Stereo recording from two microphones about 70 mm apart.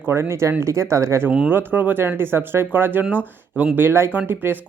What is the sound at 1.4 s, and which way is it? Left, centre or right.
Speech, right.